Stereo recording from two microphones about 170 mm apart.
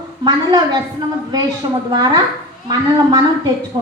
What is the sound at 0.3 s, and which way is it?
Speech, 25° right (ahead or behind).